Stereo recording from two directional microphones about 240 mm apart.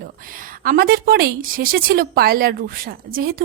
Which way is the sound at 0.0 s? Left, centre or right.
Right.